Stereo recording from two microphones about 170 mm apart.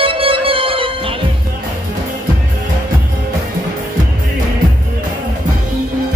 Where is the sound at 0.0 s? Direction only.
30° right (ahead or behind).